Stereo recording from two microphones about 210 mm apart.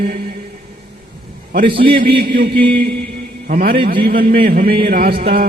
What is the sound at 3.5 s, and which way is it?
A man's voice, 45° right (ahead or behind).